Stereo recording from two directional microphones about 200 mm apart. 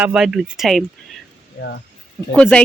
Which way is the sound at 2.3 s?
5° left (ahead or behind).